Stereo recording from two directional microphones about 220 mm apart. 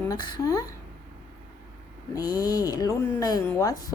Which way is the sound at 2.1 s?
15° left (ahead or behind).